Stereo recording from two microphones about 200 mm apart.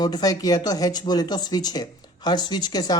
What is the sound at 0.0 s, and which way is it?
Speech, 20° left (ahead or behind).